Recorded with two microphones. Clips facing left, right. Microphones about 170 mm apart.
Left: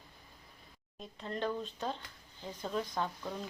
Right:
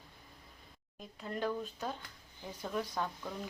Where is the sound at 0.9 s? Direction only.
5° right (ahead or behind).